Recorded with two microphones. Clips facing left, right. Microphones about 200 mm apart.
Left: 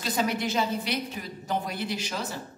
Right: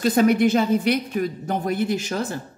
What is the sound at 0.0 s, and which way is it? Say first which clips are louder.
Speech: right 11 dB; 55° right (ahead or behind).